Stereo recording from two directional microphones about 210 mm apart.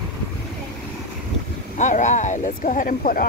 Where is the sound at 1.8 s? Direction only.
35° left (ahead or behind).